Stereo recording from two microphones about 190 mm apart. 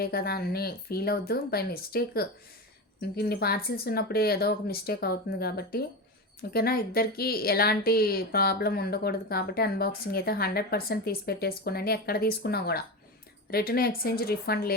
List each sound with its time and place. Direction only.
0.0 s speech: 55° left (ahead or behind)